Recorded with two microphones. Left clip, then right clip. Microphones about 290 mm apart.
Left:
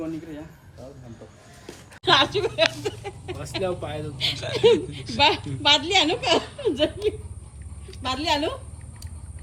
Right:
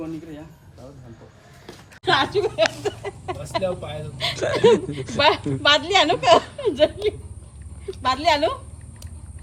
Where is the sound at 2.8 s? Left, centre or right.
Centre.